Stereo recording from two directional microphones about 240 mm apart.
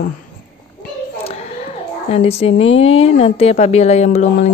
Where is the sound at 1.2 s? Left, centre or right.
Left.